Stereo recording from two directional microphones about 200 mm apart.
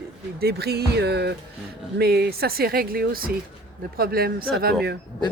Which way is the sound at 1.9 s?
50° right (ahead or behind).